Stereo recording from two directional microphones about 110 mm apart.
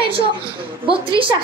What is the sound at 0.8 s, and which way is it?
Speech, 50° right (ahead or behind).